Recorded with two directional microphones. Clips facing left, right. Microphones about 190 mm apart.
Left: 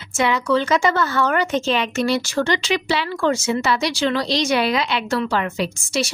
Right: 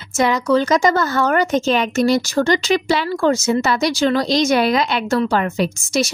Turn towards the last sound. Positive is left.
turn(degrees=-45)  # may be behind; listen again after turning